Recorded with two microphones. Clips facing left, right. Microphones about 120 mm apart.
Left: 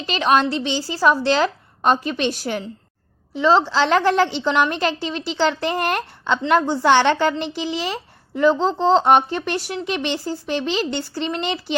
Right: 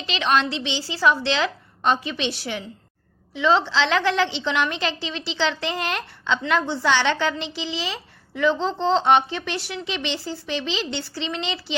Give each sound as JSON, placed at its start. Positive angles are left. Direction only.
{"t": 0.0, "sound": "a woman's voice", "side_deg": 45}